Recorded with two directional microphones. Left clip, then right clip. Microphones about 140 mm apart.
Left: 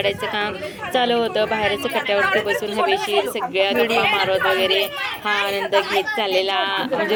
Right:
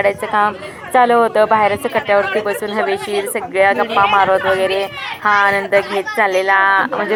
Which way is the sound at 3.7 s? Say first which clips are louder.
Right 4 dB; 5° left (ahead or behind).